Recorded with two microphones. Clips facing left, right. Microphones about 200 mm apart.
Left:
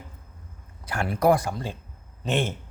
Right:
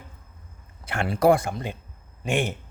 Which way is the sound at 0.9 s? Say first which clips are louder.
Right 2 dB; 25° right (ahead or behind).